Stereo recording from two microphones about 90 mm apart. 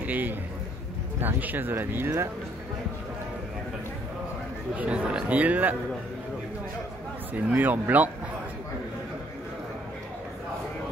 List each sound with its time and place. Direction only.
0.0 s a man's voice: 20° right (ahead or behind)
4.7 s a man's voice: 15° right (ahead or behind)
7.3 s speech: 20° right (ahead or behind)